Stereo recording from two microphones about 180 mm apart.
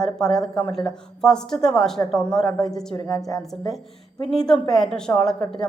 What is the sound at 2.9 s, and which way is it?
Speech, 20° left (ahead or behind).